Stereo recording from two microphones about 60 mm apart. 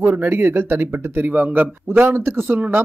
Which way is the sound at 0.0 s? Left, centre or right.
Right.